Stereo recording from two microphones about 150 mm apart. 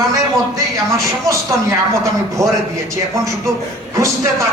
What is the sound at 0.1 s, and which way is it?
A man's voice, 20° right (ahead or behind).